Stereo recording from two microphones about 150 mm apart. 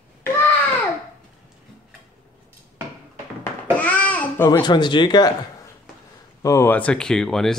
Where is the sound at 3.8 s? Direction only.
10° left (ahead or behind).